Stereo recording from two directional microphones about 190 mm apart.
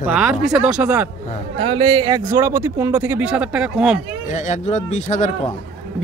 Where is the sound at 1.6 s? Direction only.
25° right (ahead or behind); by 4.0 s 5° right (ahead or behind).